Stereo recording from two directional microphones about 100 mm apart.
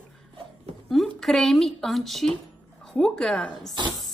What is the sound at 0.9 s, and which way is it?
A woman's voice, centre (ahead or behind).